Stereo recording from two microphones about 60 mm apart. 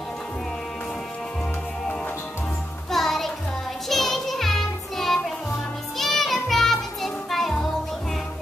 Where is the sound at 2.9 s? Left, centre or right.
Centre.